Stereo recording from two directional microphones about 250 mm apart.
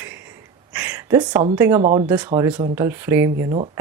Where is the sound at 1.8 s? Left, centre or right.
Right.